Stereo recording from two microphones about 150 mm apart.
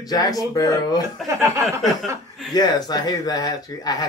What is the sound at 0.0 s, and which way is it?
Speech, 25° left (ahead or behind).